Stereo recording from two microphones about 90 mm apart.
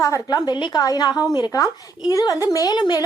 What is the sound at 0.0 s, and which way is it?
A woman's voice, 40° left (ahead or behind).